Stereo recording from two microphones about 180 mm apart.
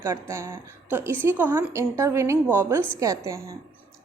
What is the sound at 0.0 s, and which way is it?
A woman's voice, 15° right (ahead or behind).